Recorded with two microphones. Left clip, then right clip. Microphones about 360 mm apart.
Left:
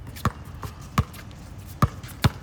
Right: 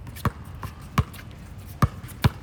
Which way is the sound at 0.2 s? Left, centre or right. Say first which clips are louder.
Left 1 dB; centre.